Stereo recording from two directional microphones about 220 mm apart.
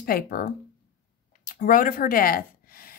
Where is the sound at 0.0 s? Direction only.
40° left (ahead or behind).